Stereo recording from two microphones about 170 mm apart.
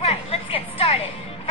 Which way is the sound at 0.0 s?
35° left (ahead or behind).